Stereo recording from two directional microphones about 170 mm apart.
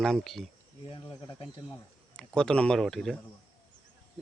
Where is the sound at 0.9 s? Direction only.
30° left (ahead or behind).